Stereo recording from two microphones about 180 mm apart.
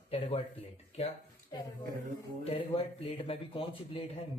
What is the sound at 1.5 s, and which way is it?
A woman's voice, 25° left (ahead or behind).